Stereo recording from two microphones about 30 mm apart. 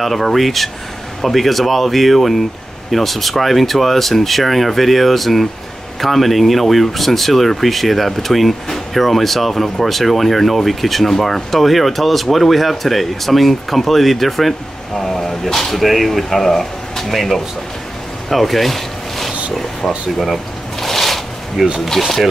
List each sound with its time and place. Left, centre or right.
0.0 s speech: centre
15.7 s speech: centre
18.3 s zipper: centre
20.8 s a sound: centre
21.6 s speech: centre